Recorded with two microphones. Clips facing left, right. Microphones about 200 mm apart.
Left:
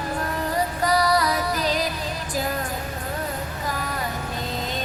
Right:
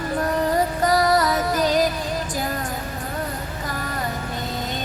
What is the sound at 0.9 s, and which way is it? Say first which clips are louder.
Music: right 2 dB; 45° right (ahead or behind).